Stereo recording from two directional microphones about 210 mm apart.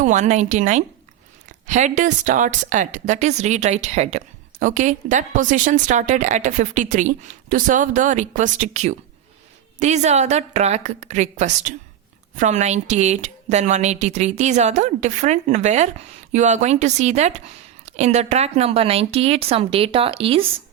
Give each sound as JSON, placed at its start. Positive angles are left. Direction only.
{"t": 0.0, "sound": "a woman's voice", "side_deg": -35}